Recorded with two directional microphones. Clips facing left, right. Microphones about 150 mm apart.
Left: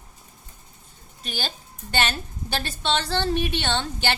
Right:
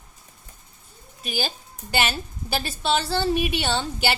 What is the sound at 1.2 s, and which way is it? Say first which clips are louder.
A woman's voice: right 4 dB; 10° right (ahead or behind).